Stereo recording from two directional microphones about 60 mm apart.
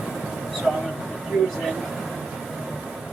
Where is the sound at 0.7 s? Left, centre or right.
Centre.